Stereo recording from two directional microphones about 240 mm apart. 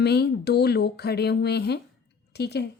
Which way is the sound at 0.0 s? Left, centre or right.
Left.